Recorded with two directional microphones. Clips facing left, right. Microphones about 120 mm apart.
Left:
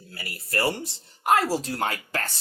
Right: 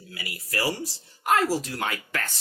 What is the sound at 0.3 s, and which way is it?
Speech, 60° left (ahead or behind).